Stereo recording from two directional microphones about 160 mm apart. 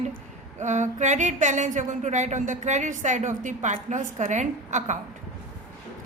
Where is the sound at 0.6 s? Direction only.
50° right (ahead or behind).